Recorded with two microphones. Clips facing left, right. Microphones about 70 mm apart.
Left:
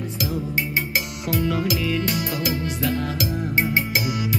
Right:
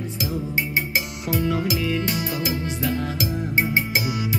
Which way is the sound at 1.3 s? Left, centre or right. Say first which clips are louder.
Even; right.